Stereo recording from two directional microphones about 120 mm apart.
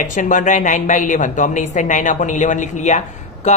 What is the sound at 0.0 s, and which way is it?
Speech, 90° left.